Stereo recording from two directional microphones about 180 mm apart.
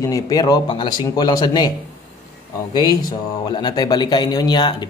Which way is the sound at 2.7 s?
20° left (ahead or behind).